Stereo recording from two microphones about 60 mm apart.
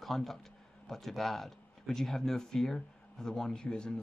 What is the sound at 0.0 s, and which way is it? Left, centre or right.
A man's voice, centre.